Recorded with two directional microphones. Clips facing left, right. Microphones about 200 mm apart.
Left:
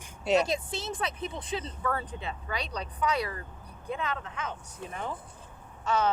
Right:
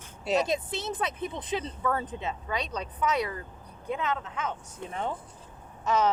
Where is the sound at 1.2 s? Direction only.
30° left (ahead or behind).